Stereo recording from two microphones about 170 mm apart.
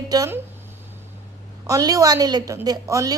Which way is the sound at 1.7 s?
20° right (ahead or behind).